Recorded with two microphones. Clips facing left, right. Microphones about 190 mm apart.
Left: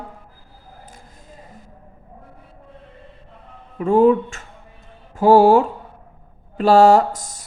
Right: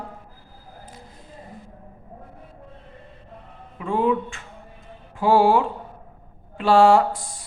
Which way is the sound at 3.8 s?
45° left (ahead or behind).